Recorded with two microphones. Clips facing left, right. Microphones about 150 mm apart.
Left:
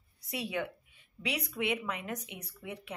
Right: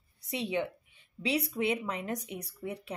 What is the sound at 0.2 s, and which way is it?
A woman's voice, 20° right (ahead or behind).